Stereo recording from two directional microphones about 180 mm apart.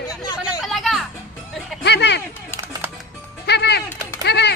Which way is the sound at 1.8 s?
70° left (ahead or behind).